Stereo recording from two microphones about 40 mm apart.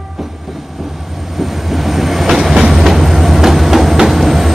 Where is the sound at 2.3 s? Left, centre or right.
Centre.